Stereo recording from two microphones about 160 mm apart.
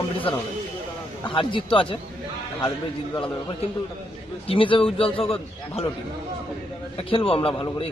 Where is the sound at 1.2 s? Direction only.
30° left (ahead or behind).